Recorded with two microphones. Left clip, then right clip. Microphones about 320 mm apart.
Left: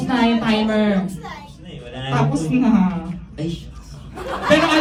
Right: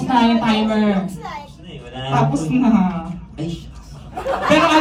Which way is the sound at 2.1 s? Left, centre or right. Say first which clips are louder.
Right 2 dB; centre.